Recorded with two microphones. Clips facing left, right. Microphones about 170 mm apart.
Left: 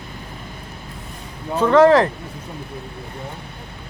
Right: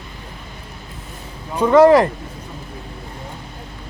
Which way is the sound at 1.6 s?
10° right (ahead or behind).